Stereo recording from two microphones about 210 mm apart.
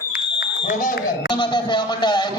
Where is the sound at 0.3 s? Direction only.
40° left (ahead or behind).